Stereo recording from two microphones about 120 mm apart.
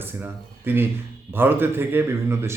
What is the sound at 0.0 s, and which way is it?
A man's voice, 15° right (ahead or behind).